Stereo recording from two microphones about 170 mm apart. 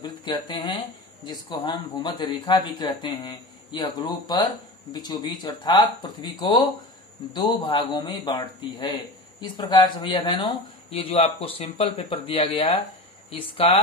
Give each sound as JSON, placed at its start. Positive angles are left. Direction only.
{"t": 0.0, "sound": "a man's voice", "side_deg": 25}